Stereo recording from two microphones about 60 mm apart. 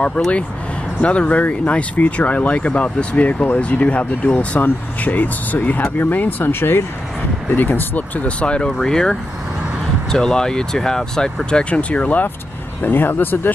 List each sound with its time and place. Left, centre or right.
0.9 s speech: left
12.8 s speech: left